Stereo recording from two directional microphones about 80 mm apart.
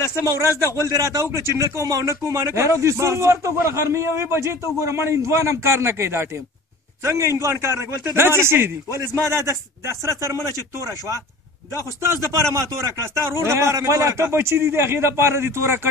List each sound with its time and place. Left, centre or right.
0.0 s a man's voice: left
0.8 s a man's voice: right